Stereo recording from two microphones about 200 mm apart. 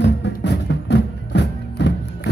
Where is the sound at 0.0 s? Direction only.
60° left (ahead or behind).